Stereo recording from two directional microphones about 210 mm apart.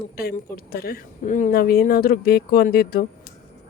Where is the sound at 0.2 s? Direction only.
45° left (ahead or behind).